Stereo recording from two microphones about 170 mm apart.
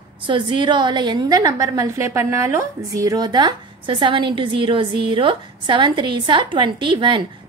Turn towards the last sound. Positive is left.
turn(degrees=-30)  # may be behind; listen again after turning